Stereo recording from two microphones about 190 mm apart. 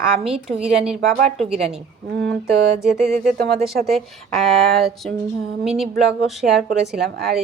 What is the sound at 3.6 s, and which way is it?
Speech, centre (ahead or behind).